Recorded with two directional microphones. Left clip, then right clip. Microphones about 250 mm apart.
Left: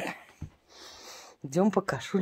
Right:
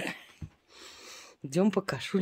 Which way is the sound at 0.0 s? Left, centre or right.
Centre.